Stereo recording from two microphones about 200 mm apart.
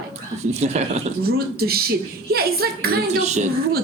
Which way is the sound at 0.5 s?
35° right (ahead or behind).